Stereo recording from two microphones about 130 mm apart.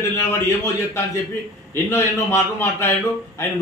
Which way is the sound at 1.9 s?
20° left (ahead or behind).